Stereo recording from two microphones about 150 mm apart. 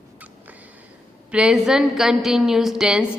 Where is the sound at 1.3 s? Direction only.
5° right (ahead or behind).